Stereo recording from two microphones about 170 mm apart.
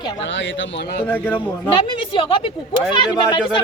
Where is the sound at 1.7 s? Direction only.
30° left (ahead or behind).